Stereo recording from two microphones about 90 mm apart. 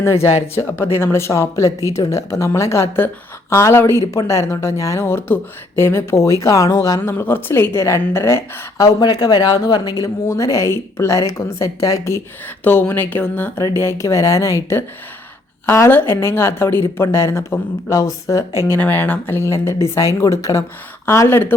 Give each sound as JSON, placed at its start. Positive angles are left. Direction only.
{"t": 0.0, "sound": "a woman's voice", "side_deg": 30}
{"t": 7.1, "sound": "a woman's voice", "side_deg": 25}
{"t": 9.0, "sound": "a woman's voice", "side_deg": 50}
{"t": 12.6, "sound": "a woman's voice", "side_deg": 25}
{"t": 18.8, "sound": "a woman's voice", "side_deg": 20}